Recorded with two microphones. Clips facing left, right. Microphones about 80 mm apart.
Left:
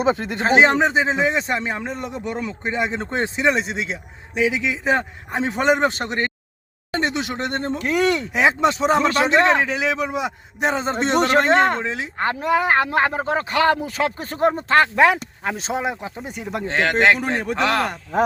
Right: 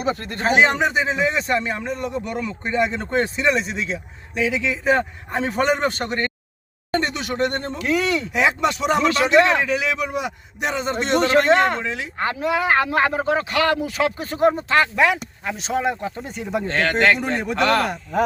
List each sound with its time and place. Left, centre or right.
0.1 s speech: left
7.8 s speech: left
8.3 s speech: left
15.7 s speech: centre
17.2 s speech: centre